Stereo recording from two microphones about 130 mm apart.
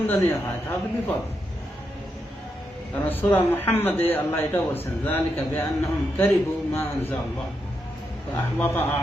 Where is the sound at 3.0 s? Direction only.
15° left (ahead or behind).